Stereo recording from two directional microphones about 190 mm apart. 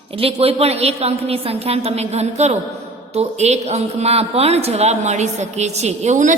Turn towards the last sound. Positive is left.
turn(degrees=-40)  # may be behind; listen again after turning